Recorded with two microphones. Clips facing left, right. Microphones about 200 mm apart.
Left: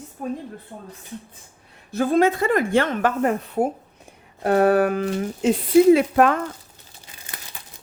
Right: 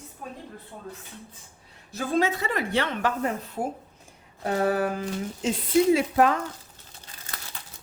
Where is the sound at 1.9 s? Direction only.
55° left (ahead or behind).